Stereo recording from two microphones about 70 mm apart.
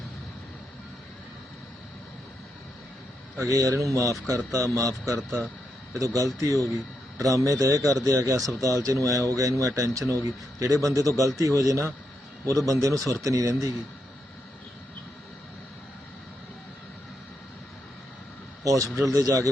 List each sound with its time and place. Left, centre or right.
3.3 s speech: right
18.6 s speech: right